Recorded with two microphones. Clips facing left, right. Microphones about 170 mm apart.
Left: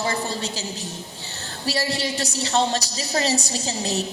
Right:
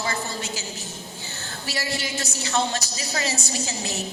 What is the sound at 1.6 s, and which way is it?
A woman's voice, 35° left (ahead or behind).